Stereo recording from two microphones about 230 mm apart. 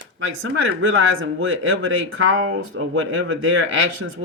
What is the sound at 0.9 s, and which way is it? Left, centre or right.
Speech, right.